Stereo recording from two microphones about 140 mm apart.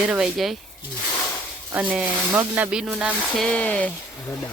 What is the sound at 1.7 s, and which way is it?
Speech, 10° right (ahead or behind).